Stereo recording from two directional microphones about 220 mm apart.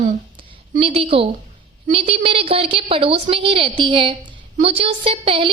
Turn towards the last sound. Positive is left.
turn(degrees=-25)  # may be behind; listen again after turning